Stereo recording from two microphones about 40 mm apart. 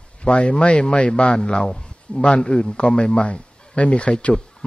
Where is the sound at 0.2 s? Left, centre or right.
Left.